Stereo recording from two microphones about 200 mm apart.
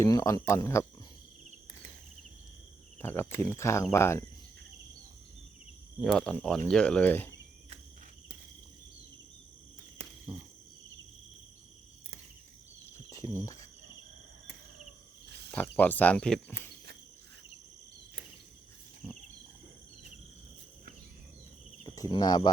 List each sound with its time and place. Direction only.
0.0 s speech: 15° left (ahead or behind)
3.0 s speech: 10° left (ahead or behind)
6.0 s speech: centre (ahead or behind)
13.1 s cricket: 15° left (ahead or behind)
15.5 s speech: 10° left (ahead or behind)
21.8 s speech: 20° left (ahead or behind)